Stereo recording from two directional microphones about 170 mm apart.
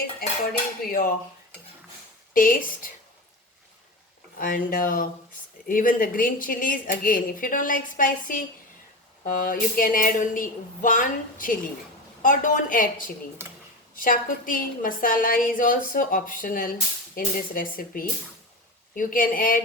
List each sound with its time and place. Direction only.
0.8 s a woman's voice: 55° left (ahead or behind)
2.3 s a woman's voice: 55° left (ahead or behind)
4.4 s a woman's voice: 55° left (ahead or behind)
13.9 s a woman's voice: 55° left (ahead or behind)